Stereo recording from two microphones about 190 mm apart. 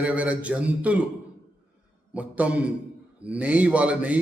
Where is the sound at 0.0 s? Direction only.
5° right (ahead or behind).